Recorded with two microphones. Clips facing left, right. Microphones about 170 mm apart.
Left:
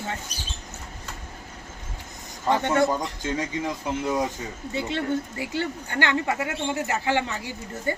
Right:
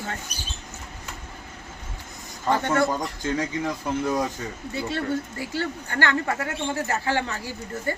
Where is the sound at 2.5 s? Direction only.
20° left (ahead or behind).